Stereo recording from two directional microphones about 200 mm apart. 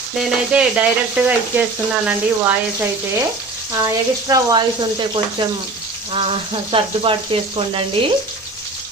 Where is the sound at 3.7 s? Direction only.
15° right (ahead or behind).